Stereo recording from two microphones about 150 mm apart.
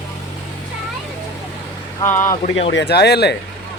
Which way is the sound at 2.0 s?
15° left (ahead or behind).